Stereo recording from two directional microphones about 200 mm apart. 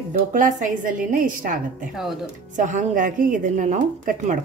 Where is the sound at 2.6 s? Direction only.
40° right (ahead or behind).